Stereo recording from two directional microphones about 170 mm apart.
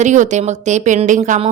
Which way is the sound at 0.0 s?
45° right (ahead or behind).